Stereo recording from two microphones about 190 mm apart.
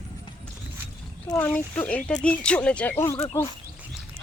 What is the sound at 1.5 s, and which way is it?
Speech, 10° left (ahead or behind).